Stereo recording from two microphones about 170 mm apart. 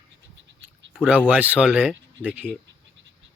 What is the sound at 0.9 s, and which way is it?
Speech, 5° right (ahead or behind).